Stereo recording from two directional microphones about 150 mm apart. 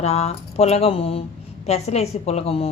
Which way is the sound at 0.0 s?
45° left (ahead or behind).